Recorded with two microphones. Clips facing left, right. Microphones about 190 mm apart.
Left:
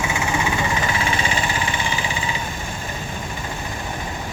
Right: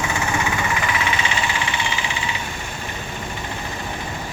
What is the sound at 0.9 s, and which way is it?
Vehicle, 35° left (ahead or behind).